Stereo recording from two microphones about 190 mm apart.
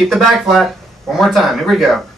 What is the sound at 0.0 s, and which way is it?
Speech, centre (ahead or behind).